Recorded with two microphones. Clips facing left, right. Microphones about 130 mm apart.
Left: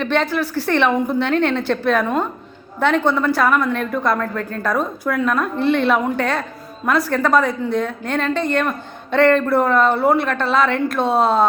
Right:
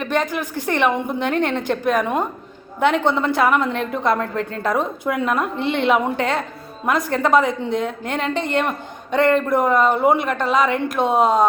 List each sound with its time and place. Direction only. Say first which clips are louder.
0.0 s a woman's voice: left 3 dB; 10° right (ahead or behind)